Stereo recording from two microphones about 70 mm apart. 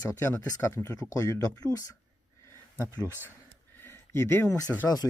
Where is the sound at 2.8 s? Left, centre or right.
Right.